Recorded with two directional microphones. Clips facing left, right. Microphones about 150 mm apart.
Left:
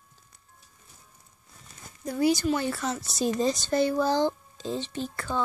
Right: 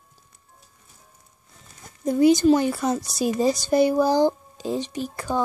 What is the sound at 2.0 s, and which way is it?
Speech, 20° right (ahead or behind).